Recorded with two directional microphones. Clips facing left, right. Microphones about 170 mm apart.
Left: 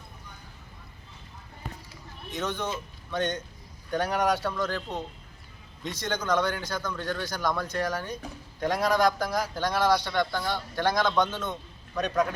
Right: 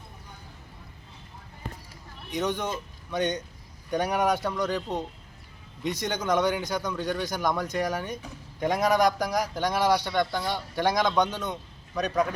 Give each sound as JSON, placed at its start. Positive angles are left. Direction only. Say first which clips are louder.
{"t": 2.3, "sound": "a man's voice", "louder": "right 3 dB", "side_deg": -15}